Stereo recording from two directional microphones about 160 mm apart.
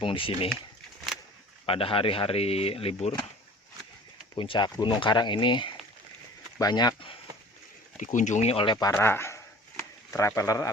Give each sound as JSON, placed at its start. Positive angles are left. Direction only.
{"t": 0.0, "sound": "speech", "side_deg": 35}
{"t": 1.1, "sound": "keys jangling", "side_deg": 0}
{"t": 1.6, "sound": "speech", "side_deg": 35}
{"t": 4.4, "sound": "speech", "side_deg": 30}
{"t": 7.9, "sound": "speech", "side_deg": 50}
{"t": 8.9, "sound": "speech", "side_deg": 15}